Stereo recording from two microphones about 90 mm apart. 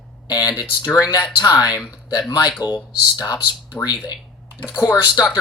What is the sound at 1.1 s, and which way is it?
Speech, 45° left (ahead or behind).